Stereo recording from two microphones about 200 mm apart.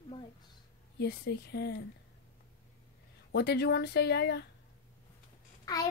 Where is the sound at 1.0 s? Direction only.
55° left (ahead or behind).